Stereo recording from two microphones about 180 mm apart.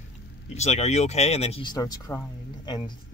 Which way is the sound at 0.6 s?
40° left (ahead or behind).